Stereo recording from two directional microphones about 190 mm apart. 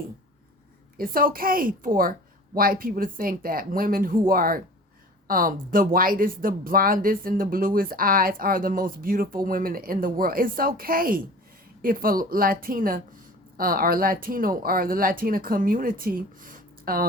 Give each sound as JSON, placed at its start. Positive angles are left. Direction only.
{"t": 0.9, "sound": "speech", "side_deg": -50}